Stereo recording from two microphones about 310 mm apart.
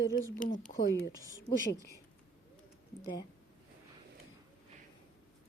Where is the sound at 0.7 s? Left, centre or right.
Left.